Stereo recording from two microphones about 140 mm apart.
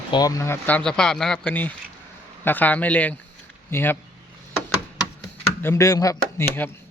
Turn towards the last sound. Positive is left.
turn(degrees=15)  # may be behind; listen again after turning